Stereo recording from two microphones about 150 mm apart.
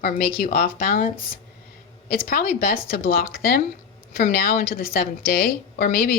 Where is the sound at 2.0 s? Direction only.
85° left.